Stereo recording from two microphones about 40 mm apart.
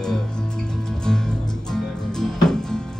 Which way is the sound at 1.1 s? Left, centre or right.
Centre.